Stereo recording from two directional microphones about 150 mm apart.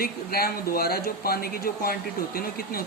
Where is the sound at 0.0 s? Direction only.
85° left.